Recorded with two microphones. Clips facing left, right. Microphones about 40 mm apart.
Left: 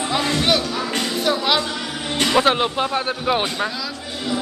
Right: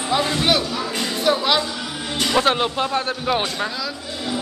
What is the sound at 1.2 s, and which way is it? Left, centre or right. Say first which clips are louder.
A man's voice: right 2 dB; centre.